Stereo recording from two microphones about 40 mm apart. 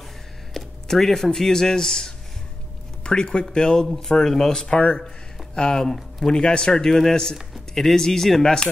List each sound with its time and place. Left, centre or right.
0.5 s a sound: centre
0.9 s speech: centre
4.6 s speech: left